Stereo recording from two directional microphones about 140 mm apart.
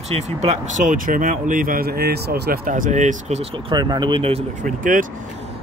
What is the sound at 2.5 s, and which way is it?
Speech, 75° right (ahead or behind).